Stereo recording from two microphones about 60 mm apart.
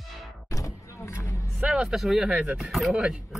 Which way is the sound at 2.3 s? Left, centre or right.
Centre.